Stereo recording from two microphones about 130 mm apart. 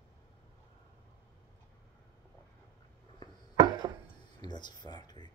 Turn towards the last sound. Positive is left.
turn(degrees=35)  # may be behind; listen again after turning